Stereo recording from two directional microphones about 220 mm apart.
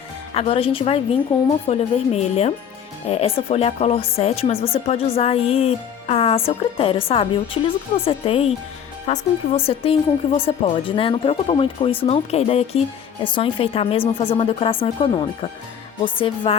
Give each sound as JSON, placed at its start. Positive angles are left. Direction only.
{"t": 0.3, "sound": "speech", "side_deg": 25}